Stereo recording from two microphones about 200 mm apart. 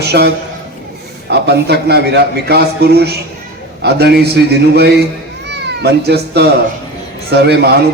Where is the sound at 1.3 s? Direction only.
55° right (ahead or behind).